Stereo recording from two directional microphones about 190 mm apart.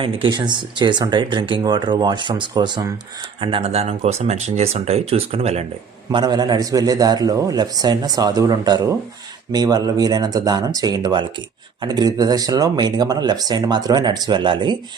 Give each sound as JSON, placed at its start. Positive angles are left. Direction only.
{"t": 0.0, "sound": "speech", "side_deg": -25}
{"t": 6.1, "sound": "speech", "side_deg": -20}